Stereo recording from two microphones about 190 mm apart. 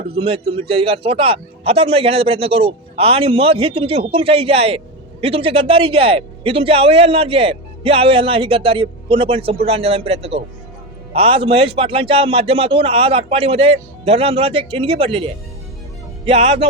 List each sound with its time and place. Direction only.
0.0 s a man's voice: 30° right (ahead or behind)